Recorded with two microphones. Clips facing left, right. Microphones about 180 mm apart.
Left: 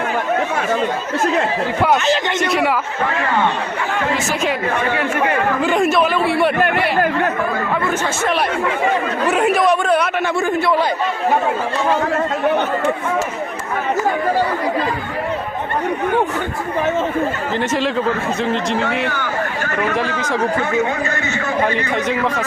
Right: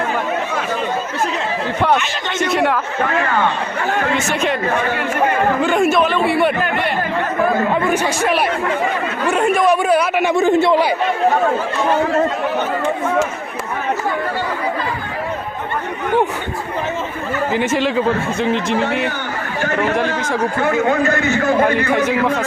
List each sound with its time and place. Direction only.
2.4 s speech: centre (ahead or behind)
4.1 s speech: centre (ahead or behind)
5.6 s speech: centre (ahead or behind)
7.9 s a man's voice: 15° right (ahead or behind)
9.2 s a man's voice: 5° left (ahead or behind); by 10.8 s 20° right (ahead or behind)
17.5 s speech: 5° right (ahead or behind)
20.7 s speech: 55° right (ahead or behind)
22.0 s speech: centre (ahead or behind)